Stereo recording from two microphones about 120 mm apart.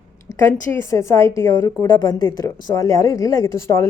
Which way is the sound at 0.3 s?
25° left (ahead or behind).